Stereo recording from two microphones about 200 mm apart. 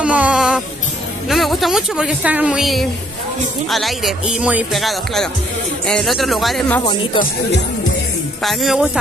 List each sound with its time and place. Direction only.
0.0 s music: 5° right (ahead or behind)
1.3 s a woman's voice: centre (ahead or behind)
6.8 s speech: 25° left (ahead or behind)
8.4 s a woman's voice: centre (ahead or behind)